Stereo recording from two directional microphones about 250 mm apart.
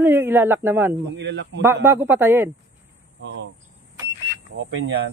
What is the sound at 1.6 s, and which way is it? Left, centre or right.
Speech, centre.